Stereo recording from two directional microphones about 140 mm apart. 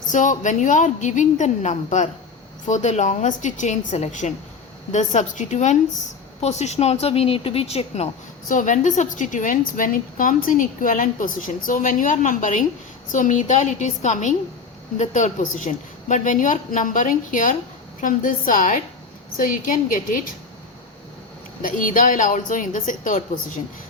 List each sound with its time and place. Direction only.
0.1 s a woman's voice: 65° left (ahead or behind); by 8.1 s 50° left (ahead or behind)
8.4 s a woman's voice: 65° left (ahead or behind)
21.6 s a woman's voice: 75° left (ahead or behind)